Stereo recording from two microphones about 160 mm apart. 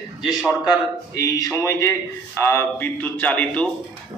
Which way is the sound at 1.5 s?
15° left (ahead or behind).